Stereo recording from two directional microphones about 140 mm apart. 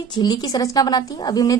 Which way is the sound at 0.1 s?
30° left (ahead or behind).